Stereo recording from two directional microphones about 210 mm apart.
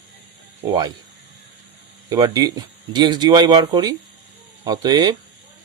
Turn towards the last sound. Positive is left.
turn(degrees=-20)  # may be behind; listen again after turning